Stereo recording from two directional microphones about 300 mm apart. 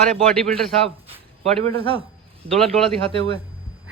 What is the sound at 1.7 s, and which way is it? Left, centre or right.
Speech, centre.